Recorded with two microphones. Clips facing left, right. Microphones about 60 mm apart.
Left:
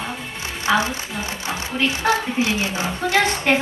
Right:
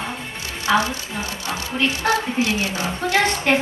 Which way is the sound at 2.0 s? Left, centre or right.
Centre.